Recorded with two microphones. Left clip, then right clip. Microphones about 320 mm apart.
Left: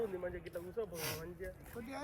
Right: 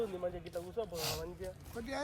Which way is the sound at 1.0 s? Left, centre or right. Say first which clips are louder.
Right 4 dB; right.